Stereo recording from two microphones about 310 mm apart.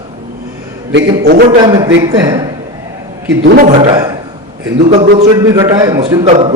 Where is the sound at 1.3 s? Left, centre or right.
Right; by 2.5 s centre.